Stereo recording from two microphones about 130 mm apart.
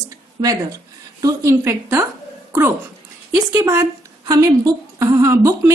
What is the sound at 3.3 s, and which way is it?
Speech, 25° right (ahead or behind).